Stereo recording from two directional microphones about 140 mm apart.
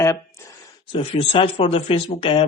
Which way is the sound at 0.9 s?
40° left (ahead or behind).